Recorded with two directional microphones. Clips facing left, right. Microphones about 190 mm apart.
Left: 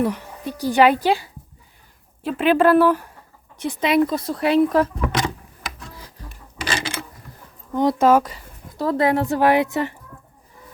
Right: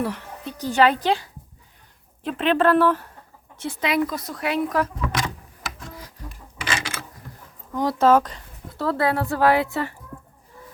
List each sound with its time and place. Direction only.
0.0 s speech: 15° left (ahead or behind); by 4.9 s 30° left (ahead or behind)
5.0 s vehicle: 25° left (ahead or behind)
6.6 s a sound: 35° left (ahead or behind)
7.8 s speech: 15° left (ahead or behind)